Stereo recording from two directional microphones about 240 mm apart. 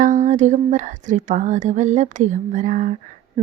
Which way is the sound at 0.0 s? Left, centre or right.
Right.